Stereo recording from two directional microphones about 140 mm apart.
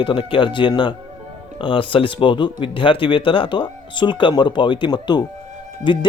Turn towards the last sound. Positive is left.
turn(degrees=35)  # may be behind; listen again after turning